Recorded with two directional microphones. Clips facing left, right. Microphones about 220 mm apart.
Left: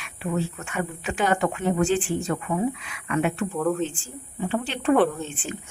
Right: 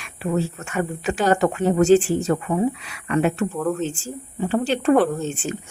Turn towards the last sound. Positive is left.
turn(degrees=-40)  # may be behind; listen again after turning